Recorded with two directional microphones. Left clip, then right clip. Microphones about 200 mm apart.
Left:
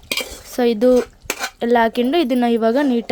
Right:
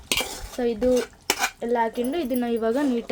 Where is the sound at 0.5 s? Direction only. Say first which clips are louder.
Left 8 dB; 40° left (ahead or behind).